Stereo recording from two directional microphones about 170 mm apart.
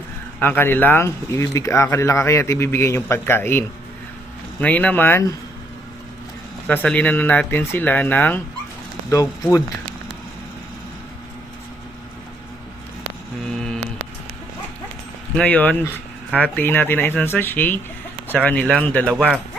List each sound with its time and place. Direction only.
0.3 s speech: 10° left (ahead or behind)
4.6 s speech: 10° left (ahead or behind)
6.7 s speech: 10° left (ahead or behind)
15.4 s speech: 10° left (ahead or behind)
19.0 s speech: 10° right (ahead or behind)